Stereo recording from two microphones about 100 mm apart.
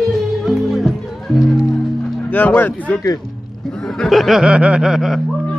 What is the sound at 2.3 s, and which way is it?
Speech, 20° left (ahead or behind).